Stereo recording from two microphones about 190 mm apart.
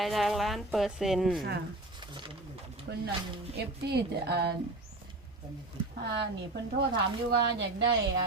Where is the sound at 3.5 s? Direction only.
60° right (ahead or behind).